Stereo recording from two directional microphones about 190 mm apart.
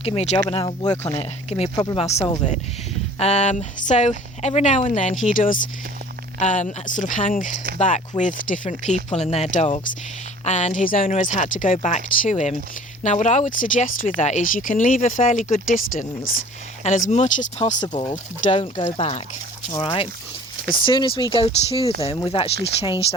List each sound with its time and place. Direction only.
0.0 s speech: 35° left (ahead or behind)
18.5 s speech: 25° left (ahead or behind)